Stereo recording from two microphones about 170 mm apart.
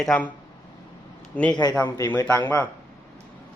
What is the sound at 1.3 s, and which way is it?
Speech, 10° left (ahead or behind).